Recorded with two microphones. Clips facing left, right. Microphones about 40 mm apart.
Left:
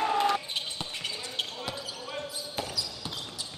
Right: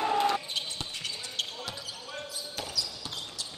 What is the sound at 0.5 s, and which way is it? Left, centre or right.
Basketball bounce, centre.